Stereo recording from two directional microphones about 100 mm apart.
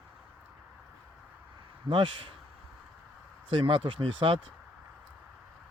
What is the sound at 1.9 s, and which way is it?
Speech, 55° right (ahead or behind).